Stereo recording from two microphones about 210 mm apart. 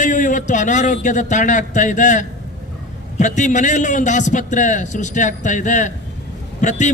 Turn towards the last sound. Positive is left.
turn(degrees=35)  # may be behind; listen again after turning